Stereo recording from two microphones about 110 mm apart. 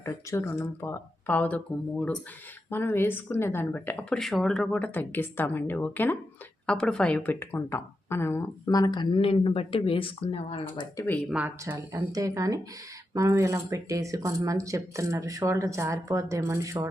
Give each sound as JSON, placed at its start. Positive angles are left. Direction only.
{"t": 0.0, "sound": "speech", "side_deg": 25}
{"t": 4.2, "sound": "a woman's voice", "side_deg": 5}
{"t": 11.3, "sound": "speech", "side_deg": -10}
{"t": 12.1, "sound": "speech", "side_deg": -30}